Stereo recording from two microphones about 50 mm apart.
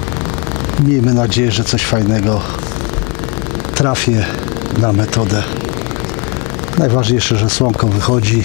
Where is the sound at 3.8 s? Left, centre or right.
Centre.